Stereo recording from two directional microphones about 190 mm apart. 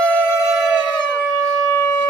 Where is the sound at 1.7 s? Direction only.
10° left (ahead or behind).